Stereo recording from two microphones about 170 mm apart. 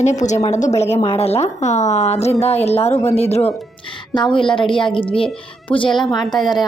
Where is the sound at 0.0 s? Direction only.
45° left (ahead or behind); by 6.1 s 30° left (ahead or behind).